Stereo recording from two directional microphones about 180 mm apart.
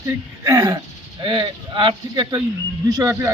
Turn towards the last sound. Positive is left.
turn(degrees=-15)  # may be behind; listen again after turning